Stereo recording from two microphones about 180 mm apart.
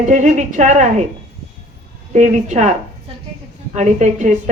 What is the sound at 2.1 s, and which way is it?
Speech, 40° right (ahead or behind).